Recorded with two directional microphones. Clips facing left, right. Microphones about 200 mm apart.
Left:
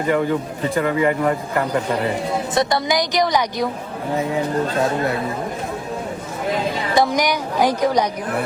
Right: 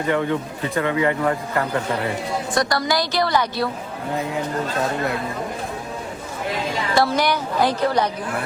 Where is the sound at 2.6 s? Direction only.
20° left (ahead or behind).